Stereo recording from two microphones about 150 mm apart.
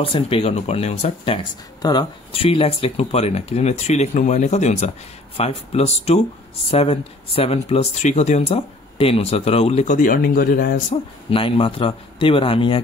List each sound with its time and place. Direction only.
0.0 s speech: 40° left (ahead or behind)
1.8 s speech: 30° left (ahead or behind); by 9.9 s 45° left (ahead or behind)
9.9 s speech: 70° left (ahead or behind)
10.9 s speech: 35° left (ahead or behind)